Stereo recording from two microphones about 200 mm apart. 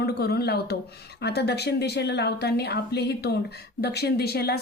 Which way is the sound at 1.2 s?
55° left (ahead or behind).